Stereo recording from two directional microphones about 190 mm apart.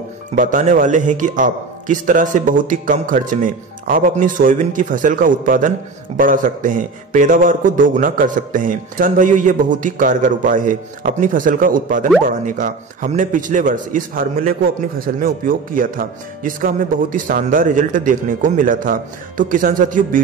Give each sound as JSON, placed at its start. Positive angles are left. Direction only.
{"t": 0.4, "sound": "a man's voice", "side_deg": -40}